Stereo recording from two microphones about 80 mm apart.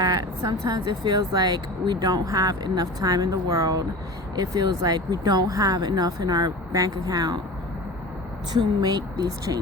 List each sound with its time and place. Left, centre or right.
0.0 s a woman's voice: right
0.9 s speech: right
8.5 s speech: right